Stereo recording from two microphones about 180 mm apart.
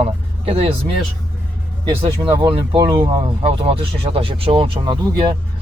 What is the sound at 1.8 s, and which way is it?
Speech, 30° right (ahead or behind).